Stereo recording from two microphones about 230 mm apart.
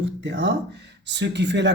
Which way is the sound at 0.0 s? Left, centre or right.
Right.